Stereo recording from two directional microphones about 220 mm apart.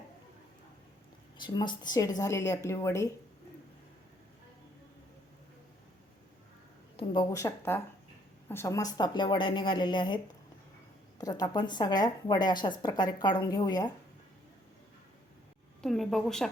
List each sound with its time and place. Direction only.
1.4 s a woman's voice: 20° left (ahead or behind)
6.9 s a woman's voice: 20° left (ahead or behind)
11.2 s a woman's voice: 15° left (ahead or behind)
15.8 s speech: centre (ahead or behind)